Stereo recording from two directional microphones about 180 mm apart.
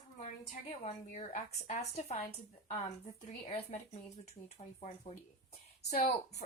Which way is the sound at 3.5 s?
35° left (ahead or behind).